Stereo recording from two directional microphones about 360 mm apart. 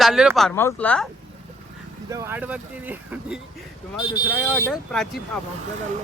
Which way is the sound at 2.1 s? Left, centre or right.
Centre.